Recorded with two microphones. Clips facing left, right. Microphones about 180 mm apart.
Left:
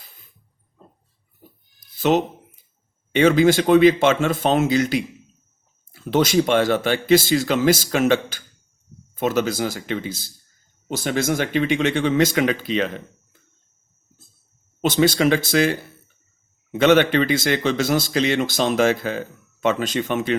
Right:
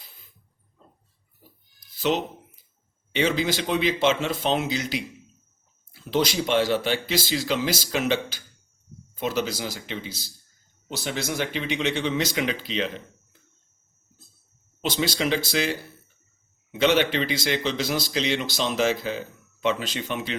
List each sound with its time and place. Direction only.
2.0 s speech: 50° left (ahead or behind)
14.8 s speech: 50° left (ahead or behind)
16.7 s speech: 50° left (ahead or behind)